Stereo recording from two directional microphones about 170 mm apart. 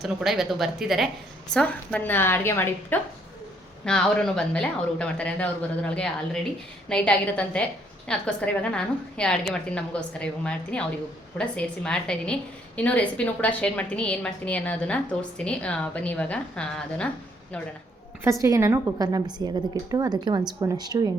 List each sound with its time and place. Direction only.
0.0 s a woman's voice: centre (ahead or behind)
18.2 s a woman's voice: 15° right (ahead or behind)